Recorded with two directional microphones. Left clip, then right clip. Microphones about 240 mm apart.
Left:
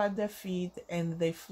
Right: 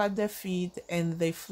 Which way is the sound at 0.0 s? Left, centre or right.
Right.